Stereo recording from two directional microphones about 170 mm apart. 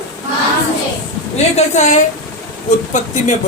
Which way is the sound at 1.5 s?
45° left (ahead or behind).